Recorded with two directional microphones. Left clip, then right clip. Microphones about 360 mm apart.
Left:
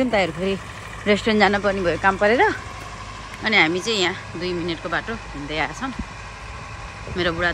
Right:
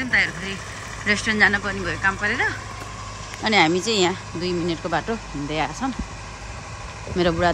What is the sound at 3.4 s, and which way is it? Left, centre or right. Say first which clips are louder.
Speech: even; centre.